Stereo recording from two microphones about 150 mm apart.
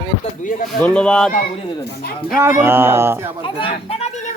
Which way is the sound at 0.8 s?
5° left (ahead or behind).